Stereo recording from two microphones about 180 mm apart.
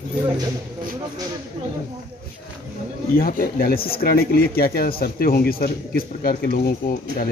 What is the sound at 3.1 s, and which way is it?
Speech, 55° left (ahead or behind).